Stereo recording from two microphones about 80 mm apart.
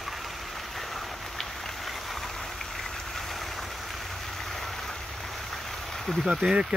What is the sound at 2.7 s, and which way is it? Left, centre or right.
Vehicle, centre.